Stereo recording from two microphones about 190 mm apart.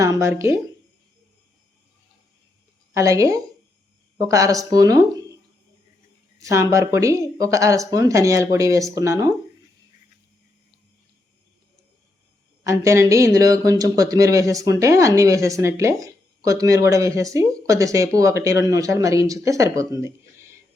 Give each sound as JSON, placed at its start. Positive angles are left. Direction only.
{"t": 0.0, "sound": "speech", "side_deg": -15}
{"t": 2.9, "sound": "a woman's voice", "side_deg": -15}
{"t": 6.4, "sound": "speech", "side_deg": -15}
{"t": 12.6, "sound": "speech", "side_deg": -15}